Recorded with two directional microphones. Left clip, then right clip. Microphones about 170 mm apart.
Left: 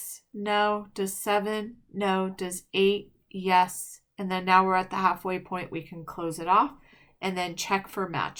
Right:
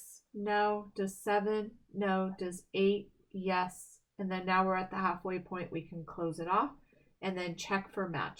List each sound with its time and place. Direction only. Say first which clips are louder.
0.4 s speech: left 6 dB; 15° left (ahead or behind)